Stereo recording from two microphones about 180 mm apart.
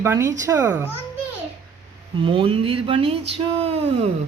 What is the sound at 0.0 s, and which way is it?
Speech, 15° right (ahead or behind).